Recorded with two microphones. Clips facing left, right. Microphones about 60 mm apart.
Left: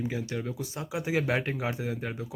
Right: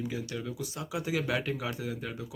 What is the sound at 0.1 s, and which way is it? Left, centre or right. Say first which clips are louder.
Speech: left 3 dB; left.